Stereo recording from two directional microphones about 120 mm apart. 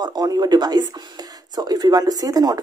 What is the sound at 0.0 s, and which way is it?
Speech, 35° right (ahead or behind).